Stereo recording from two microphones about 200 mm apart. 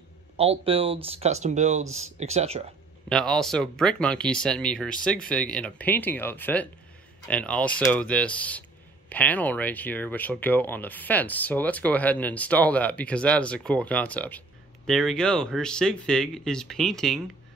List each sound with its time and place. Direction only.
0.4 s speech: 30° right (ahead or behind)
3.1 s speech: 5° left (ahead or behind)